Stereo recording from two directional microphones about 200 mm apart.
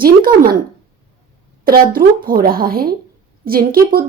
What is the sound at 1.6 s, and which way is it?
Speech, 45° right (ahead or behind).